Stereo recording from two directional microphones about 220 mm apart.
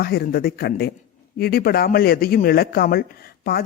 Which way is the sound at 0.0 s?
45° left (ahead or behind).